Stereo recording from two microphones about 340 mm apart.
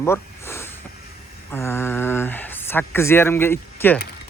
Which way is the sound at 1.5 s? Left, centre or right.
Centre.